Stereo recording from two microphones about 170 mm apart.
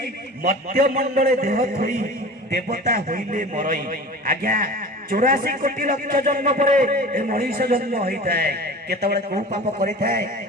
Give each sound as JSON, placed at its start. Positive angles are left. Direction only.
{"t": 0.4, "sound": "a man's voice", "side_deg": -50}
{"t": 9.3, "sound": "a man's voice", "side_deg": -45}